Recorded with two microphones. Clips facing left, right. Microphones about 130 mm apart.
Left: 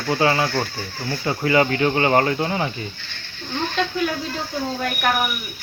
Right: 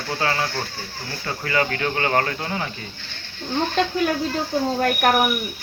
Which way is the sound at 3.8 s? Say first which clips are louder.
Right 2 dB; 45° right (ahead or behind).